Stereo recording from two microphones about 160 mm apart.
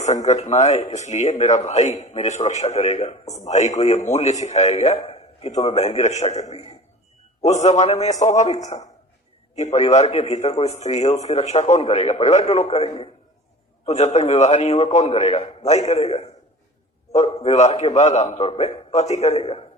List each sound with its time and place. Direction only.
0.0 s a man's voice: 45° left (ahead or behind)
17.4 s a man's voice: 45° left (ahead or behind)